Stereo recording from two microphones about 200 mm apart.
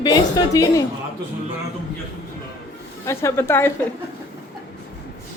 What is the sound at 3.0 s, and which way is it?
Speech, 15° left (ahead or behind).